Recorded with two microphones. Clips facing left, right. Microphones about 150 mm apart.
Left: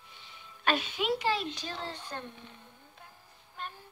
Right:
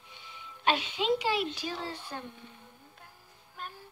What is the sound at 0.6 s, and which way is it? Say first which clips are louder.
Speech: right 1 dB; 20° right (ahead or behind).